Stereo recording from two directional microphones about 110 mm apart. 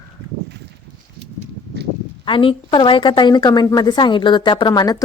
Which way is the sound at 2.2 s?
50° left (ahead or behind).